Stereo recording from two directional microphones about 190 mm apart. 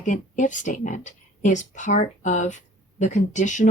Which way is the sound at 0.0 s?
40° left (ahead or behind).